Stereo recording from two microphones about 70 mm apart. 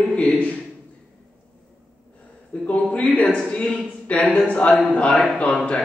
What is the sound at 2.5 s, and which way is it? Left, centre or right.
A man's voice, centre.